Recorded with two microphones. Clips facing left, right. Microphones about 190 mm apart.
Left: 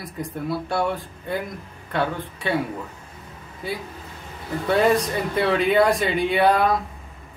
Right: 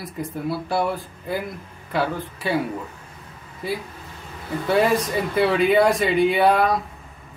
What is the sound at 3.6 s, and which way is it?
Speech, centre (ahead or behind).